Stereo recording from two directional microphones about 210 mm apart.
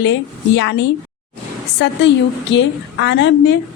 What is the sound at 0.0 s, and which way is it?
A woman's voice, 60° left (ahead or behind).